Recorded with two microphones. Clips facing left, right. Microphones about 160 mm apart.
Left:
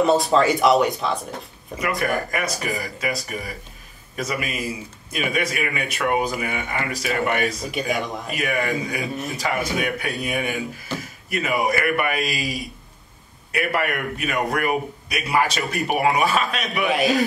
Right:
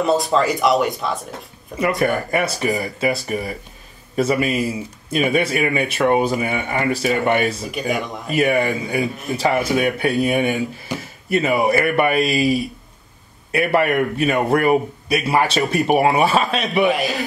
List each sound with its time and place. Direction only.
0.0 s speech: centre (ahead or behind)
1.8 s a man's voice: 25° right (ahead or behind)
7.7 s speech: centre (ahead or behind)
8.3 s a man's voice: 30° right (ahead or behind)
10.9 s a sound: 15° right (ahead or behind)
11.2 s a man's voice: 30° right (ahead or behind)
16.8 s speech: centre (ahead or behind)